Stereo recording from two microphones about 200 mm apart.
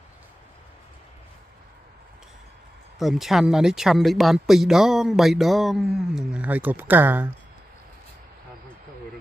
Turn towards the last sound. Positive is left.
turn(degrees=-10)  # may be behind; listen again after turning